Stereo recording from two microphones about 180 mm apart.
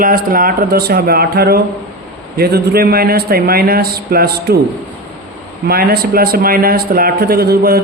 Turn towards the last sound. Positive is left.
turn(degrees=-60)  # may be behind; listen again after turning